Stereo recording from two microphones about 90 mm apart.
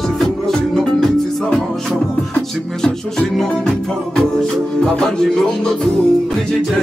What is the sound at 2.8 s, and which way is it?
Music, 5° left (ahead or behind).